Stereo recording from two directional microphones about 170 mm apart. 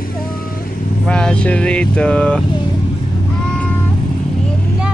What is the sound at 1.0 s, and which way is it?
Speech, 5° left (ahead or behind).